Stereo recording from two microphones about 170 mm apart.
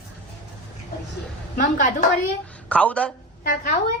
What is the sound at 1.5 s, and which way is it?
Speech, 50° left (ahead or behind).